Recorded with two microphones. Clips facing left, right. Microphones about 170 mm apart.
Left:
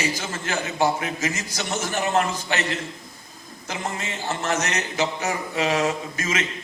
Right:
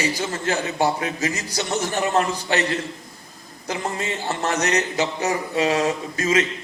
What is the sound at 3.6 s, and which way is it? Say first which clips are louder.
Speech: right 4 dB; 35° right (ahead or behind).